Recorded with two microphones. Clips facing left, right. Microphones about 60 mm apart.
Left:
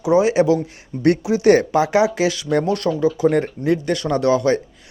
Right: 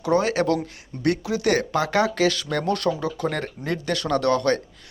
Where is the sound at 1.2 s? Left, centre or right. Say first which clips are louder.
Left 8 dB; left.